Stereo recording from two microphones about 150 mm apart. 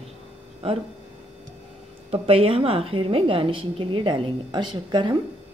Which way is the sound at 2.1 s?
40° right (ahead or behind).